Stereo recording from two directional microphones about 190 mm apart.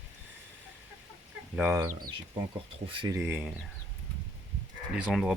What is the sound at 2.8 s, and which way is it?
Speech, 25° right (ahead or behind).